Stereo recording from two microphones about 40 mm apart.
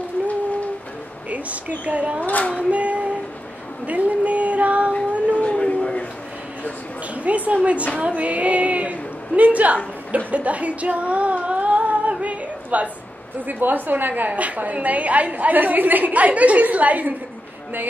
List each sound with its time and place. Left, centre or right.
1.3 s a woman's voice: right
2.2 s speech: left
2.7 s child singing: right
3.8 s speech: right
5.3 s howl: left
7.2 s a woman's voice: right
10.1 s a sound: right
13.5 s a woman's voice: right